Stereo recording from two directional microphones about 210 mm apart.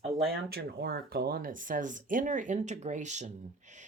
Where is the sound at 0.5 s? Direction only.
50° right (ahead or behind).